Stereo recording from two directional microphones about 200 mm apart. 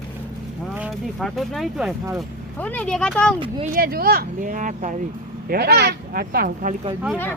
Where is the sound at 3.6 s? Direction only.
45° right (ahead or behind).